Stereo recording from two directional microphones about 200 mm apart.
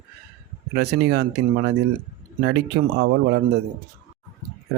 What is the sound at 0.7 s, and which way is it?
Speech, 55° right (ahead or behind).